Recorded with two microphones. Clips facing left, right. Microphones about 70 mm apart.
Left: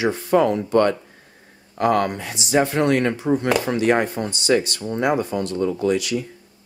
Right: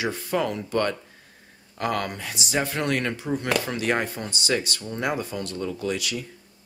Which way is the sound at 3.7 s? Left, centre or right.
Left.